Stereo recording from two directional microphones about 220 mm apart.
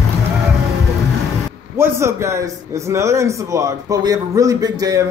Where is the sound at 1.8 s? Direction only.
10° right (ahead or behind).